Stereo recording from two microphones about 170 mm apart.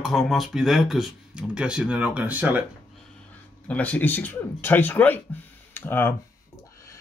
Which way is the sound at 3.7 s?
10° left (ahead or behind).